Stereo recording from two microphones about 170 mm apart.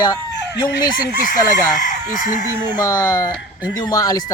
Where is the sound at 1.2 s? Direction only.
50° left (ahead or behind).